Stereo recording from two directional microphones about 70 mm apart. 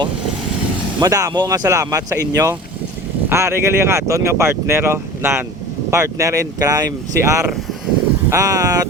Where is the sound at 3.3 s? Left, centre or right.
Right.